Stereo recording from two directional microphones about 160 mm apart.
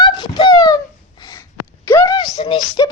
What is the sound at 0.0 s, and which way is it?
Wail, 25° left (ahead or behind).